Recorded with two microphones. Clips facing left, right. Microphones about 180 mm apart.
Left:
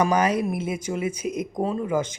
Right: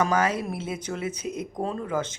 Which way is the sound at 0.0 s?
15° left (ahead or behind).